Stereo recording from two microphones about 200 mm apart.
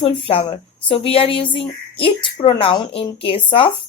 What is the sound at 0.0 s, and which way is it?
Speech, 25° left (ahead or behind).